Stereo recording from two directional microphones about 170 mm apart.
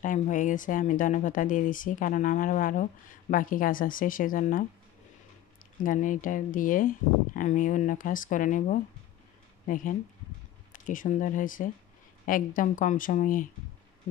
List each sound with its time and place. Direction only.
0.0 s speech: 50° left (ahead or behind)
5.9 s speech: 50° left (ahead or behind)
10.7 s speech: 50° left (ahead or behind)